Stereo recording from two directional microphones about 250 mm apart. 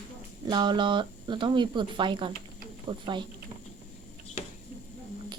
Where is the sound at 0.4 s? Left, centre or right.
Centre.